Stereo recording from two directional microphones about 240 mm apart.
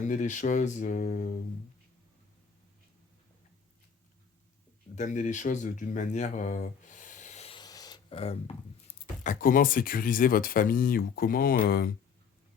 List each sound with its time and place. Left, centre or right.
0.0 s speech: left
4.9 s speech: left